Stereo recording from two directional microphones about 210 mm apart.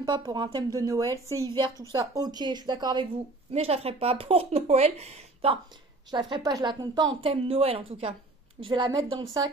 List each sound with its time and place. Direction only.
0.0 s speech: 20° right (ahead or behind)